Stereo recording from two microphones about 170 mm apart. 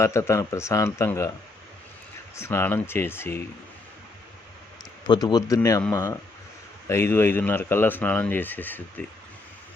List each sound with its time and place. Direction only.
0.0 s speech: 15° left (ahead or behind)
2.3 s speech: 15° left (ahead or behind)
5.0 s speech: 25° left (ahead or behind)